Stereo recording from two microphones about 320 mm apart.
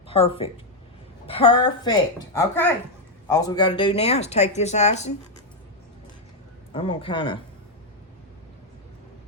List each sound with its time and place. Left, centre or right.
0.1 s a woman's voice: centre
6.7 s a woman's voice: centre